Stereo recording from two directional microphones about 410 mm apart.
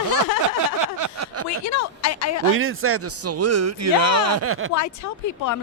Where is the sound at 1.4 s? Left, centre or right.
Left.